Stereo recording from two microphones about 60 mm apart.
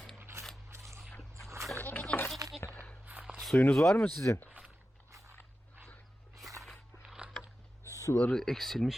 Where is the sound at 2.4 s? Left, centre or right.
Right.